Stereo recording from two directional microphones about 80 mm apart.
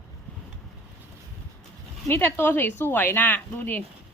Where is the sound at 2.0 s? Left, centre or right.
Left.